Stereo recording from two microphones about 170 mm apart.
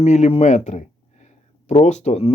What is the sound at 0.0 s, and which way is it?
Speech, 40° left (ahead or behind).